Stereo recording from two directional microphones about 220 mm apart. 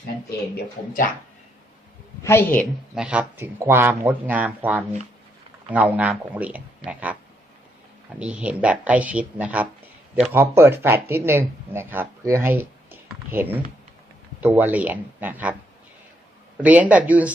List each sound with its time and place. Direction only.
2.2 s a woman's voice: 10° left (ahead or behind); by 7.2 s 5° right (ahead or behind)
8.2 s a woman's voice: 5° right (ahead or behind)
16.6 s a woman's voice: 5° right (ahead or behind)